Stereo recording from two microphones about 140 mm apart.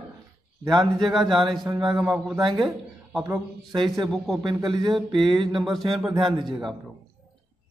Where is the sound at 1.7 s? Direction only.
25° right (ahead or behind).